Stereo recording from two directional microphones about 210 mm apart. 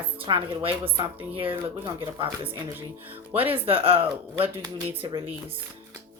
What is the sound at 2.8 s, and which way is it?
Speech, 10° right (ahead or behind).